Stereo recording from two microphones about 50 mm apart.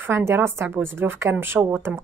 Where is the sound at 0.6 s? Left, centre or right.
Right.